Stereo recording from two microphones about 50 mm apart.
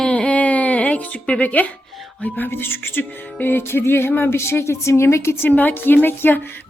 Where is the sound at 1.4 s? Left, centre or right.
Left.